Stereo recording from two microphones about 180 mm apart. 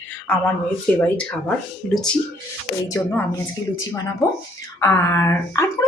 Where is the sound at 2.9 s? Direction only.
15° left (ahead or behind).